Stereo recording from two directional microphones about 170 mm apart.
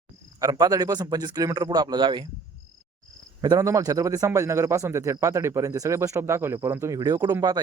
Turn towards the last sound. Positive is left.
turn(degrees=-25)  # may be behind; listen again after turning